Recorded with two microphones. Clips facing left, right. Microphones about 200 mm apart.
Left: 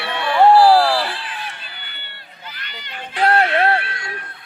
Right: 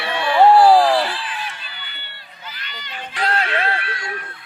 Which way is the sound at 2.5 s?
55° left (ahead or behind).